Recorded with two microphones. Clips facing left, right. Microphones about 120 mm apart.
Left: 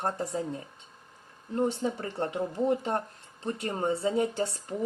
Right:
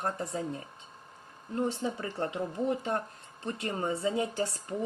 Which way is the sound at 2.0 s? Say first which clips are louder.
Left 2 dB; 30° left (ahead or behind).